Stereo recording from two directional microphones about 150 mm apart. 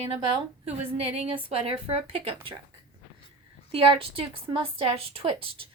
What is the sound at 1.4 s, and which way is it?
A woman's voice, 40° right (ahead or behind).